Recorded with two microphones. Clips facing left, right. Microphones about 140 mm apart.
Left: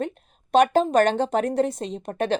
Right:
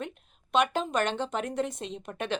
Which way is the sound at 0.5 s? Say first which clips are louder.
Left 9 dB; 40° left (ahead or behind).